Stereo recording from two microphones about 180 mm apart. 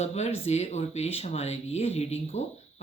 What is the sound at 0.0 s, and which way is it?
Speech, 40° left (ahead or behind).